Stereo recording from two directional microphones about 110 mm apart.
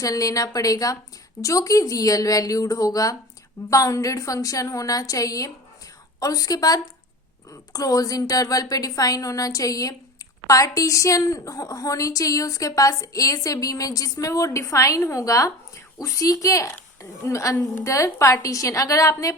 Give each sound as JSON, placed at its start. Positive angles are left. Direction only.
{"t": 0.0, "sound": "a woman's voice", "side_deg": 30}